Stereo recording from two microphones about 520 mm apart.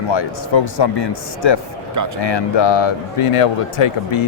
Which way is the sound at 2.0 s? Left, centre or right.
Right.